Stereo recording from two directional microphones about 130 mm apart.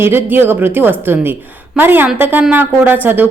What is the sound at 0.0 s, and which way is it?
A woman's voice, 15° right (ahead or behind).